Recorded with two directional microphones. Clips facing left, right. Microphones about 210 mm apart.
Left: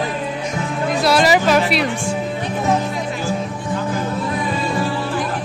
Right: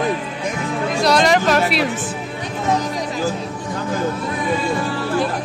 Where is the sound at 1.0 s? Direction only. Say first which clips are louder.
Even; 5° left (ahead or behind).